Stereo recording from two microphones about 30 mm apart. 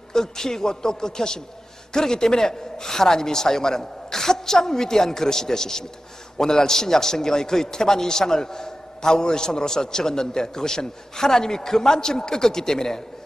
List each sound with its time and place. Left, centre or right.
0.1 s a man's voice: centre